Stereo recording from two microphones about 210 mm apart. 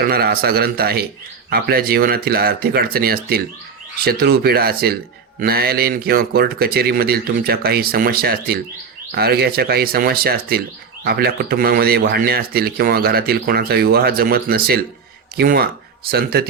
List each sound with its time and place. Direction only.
0.0 s speech: 45° right (ahead or behind)